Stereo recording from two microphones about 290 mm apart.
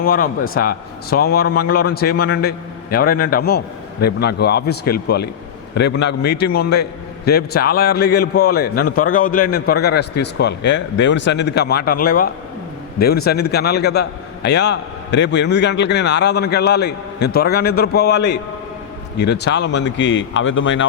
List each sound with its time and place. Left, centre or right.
0.0 s a man's voice: left